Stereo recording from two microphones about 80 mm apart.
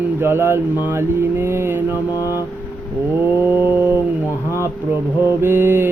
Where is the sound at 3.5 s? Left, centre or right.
Right.